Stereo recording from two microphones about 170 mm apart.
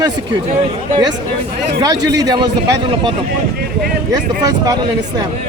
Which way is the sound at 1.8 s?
20° right (ahead or behind).